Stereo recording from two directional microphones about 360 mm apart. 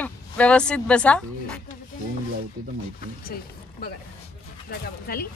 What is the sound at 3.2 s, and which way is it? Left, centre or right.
Speech, left.